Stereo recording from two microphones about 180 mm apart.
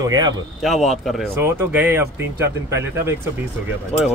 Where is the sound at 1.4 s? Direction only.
10° right (ahead or behind).